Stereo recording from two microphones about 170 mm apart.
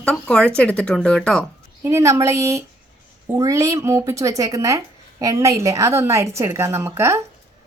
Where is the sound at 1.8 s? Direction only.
15° right (ahead or behind).